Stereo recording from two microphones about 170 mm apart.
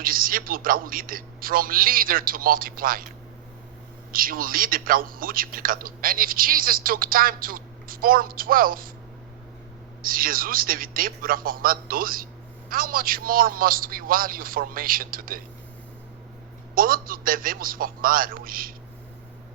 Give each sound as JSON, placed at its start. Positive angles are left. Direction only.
{"t": 0.0, "sound": "a man's voice", "side_deg": -55}
{"t": 4.1, "sound": "a man's voice", "side_deg": -55}
{"t": 10.0, "sound": "a man's voice", "side_deg": -55}
{"t": 16.7, "sound": "a man's voice", "side_deg": -55}